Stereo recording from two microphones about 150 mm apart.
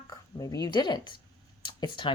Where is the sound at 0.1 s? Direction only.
25° left (ahead or behind).